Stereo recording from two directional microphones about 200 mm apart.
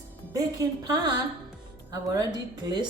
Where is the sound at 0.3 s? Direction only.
20° right (ahead or behind).